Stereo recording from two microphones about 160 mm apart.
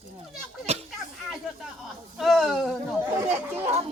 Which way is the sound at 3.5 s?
40° right (ahead or behind).